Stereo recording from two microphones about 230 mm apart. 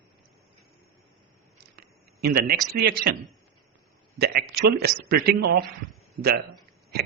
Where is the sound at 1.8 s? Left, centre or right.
Right.